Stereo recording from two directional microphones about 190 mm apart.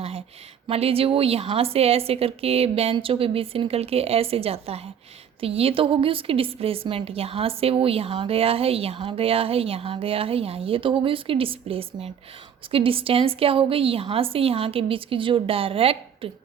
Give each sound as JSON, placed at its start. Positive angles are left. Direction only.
{"t": 0.7, "sound": "a woman's voice", "side_deg": -30}